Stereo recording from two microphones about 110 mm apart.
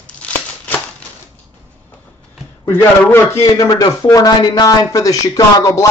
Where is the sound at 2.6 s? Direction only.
20° left (ahead or behind).